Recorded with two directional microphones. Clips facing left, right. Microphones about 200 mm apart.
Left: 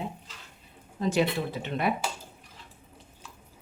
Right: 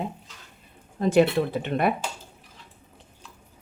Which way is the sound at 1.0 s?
55° right (ahead or behind).